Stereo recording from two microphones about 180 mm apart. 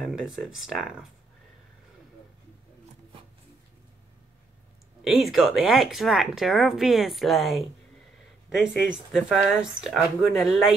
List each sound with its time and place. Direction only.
0.0 s speech: centre (ahead or behind)
5.0 s speech: centre (ahead or behind)